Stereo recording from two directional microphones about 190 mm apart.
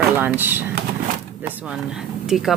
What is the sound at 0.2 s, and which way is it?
Speech, 10° right (ahead or behind).